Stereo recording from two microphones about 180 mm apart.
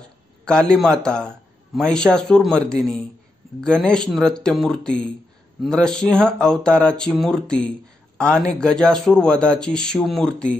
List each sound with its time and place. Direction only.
0.5 s a man's voice: 5° left (ahead or behind)